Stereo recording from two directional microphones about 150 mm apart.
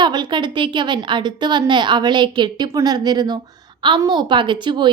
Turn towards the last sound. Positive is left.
turn(degrees=-30)  # may be behind; listen again after turning